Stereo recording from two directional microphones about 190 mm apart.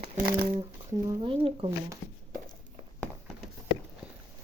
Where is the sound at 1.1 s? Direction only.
25° right (ahead or behind).